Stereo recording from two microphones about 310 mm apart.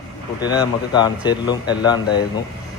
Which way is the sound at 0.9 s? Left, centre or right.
Centre.